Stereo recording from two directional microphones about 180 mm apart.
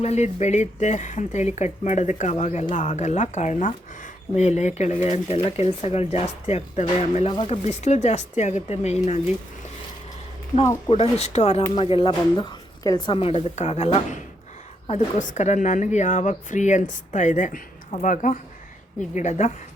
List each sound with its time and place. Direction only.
0.0 s speech: 40° left (ahead or behind)
10.8 s a woman's voice: 30° left (ahead or behind)